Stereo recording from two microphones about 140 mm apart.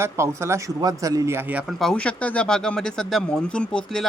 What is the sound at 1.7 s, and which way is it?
Speech, centre (ahead or behind).